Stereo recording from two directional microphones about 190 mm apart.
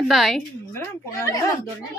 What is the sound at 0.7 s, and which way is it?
Speech, 15° left (ahead or behind).